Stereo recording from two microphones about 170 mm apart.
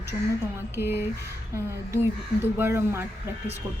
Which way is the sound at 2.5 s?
15° right (ahead or behind).